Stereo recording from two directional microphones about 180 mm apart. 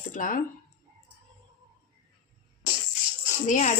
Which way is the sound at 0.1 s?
45° left (ahead or behind).